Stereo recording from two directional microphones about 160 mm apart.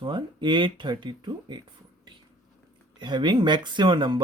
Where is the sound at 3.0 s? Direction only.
30° right (ahead or behind).